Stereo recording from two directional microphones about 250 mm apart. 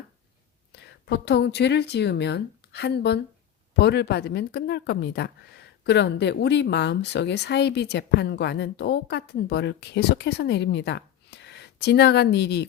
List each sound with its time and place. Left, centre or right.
0.7 s speech: left